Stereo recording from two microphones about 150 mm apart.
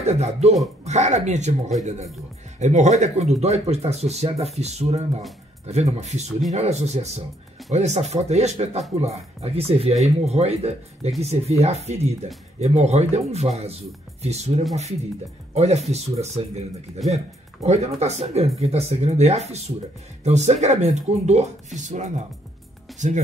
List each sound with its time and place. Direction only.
0.0 s speech: 45° right (ahead or behind)
15.5 s speech: 45° right (ahead or behind)